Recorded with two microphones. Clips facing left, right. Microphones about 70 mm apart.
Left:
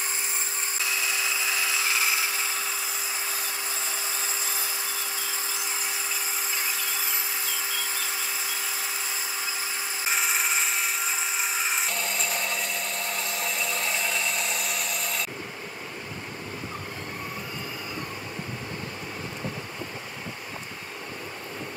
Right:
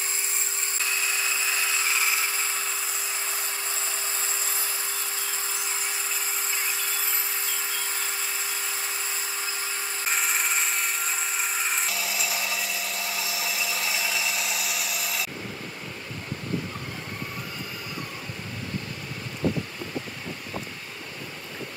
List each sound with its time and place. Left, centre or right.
0.8 s wood: centre
7.4 s a sound: centre
10.0 s tools: centre
19.4 s vehicle: right